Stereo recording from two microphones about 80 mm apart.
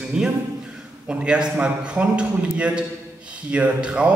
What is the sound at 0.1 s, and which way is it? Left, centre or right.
A man's voice, centre.